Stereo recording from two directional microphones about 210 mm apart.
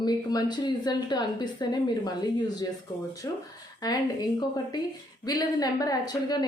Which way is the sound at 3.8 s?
15° left (ahead or behind).